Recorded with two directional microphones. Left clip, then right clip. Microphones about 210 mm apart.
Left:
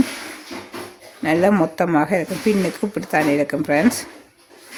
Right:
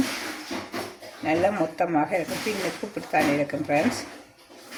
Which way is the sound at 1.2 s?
50° left (ahead or behind).